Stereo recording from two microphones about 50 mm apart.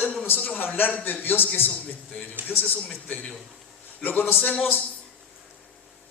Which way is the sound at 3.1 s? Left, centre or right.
Left.